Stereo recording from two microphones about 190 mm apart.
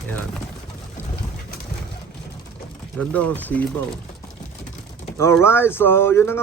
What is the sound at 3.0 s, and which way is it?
Speech, 5° left (ahead or behind).